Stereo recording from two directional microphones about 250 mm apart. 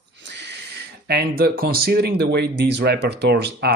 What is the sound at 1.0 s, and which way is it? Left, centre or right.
Speech, right.